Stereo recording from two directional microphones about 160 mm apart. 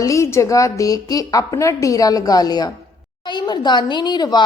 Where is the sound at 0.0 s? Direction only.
20° left (ahead or behind).